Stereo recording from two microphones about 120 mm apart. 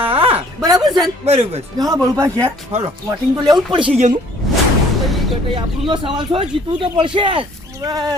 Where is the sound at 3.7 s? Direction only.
45° right (ahead or behind).